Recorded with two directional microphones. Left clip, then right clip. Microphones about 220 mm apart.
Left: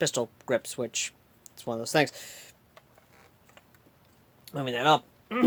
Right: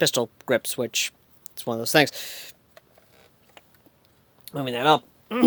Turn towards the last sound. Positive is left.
turn(degrees=-35)  # may be behind; listen again after turning